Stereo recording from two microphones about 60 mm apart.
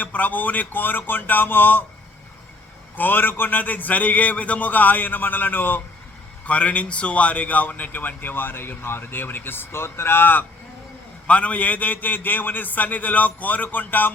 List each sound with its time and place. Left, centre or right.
0.0 s a man's voice: left
2.9 s a man's voice: left
11.3 s a man's voice: left